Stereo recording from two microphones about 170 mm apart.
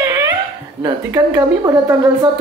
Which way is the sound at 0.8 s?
20° right (ahead or behind).